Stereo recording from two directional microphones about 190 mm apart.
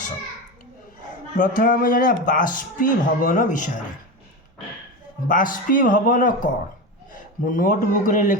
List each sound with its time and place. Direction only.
1.4 s a man's voice: 45° left (ahead or behind)
5.3 s a man's voice: 45° left (ahead or behind)